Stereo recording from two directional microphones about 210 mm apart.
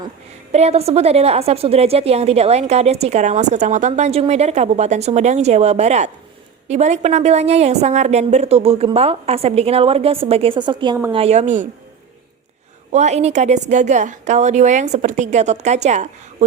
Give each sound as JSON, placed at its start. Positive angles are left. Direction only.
{"t": 0.5, "sound": "a woman's voice", "side_deg": -30}
{"t": 12.9, "sound": "a woman's voice", "side_deg": -35}